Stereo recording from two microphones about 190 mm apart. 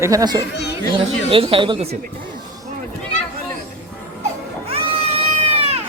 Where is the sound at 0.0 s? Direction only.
20° right (ahead or behind).